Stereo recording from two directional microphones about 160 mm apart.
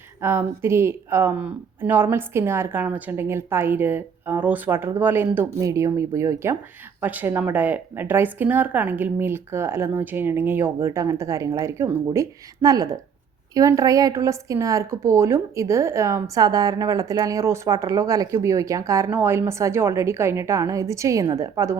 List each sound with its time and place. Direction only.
0.2 s speech: 15° right (ahead or behind)